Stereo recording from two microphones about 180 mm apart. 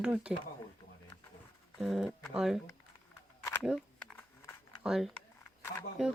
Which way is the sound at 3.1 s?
15° left (ahead or behind).